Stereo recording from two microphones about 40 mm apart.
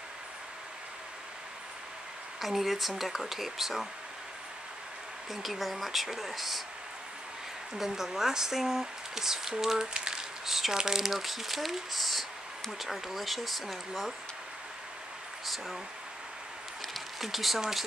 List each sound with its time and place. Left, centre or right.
2.4 s speech: centre
5.3 s speech: centre
7.7 s speech: centre
9.9 s a sound: centre
10.4 s speech: centre
15.4 s speech: centre
17.2 s speech: centre